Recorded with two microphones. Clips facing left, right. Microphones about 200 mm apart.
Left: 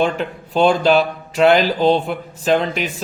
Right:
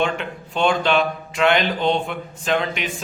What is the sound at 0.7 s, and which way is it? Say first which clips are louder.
Speech: left 4 dB; 35° left (ahead or behind).